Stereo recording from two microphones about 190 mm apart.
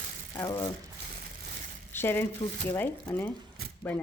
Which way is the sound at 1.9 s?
10° left (ahead or behind).